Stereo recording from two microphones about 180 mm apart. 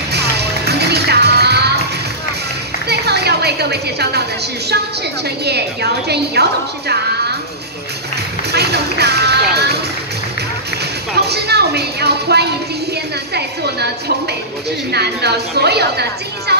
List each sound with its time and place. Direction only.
0.1 s music: 65° right (ahead or behind)
2.9 s a sound: 65° right (ahead or behind)
5.4 s a woman's voice: 65° right (ahead or behind)
8.5 s speech: 65° right (ahead or behind)
11.1 s a woman's voice: 65° right (ahead or behind)